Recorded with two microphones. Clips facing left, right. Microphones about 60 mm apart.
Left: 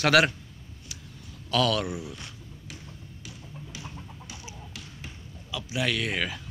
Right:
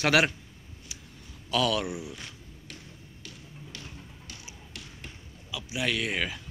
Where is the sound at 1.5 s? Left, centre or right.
Centre.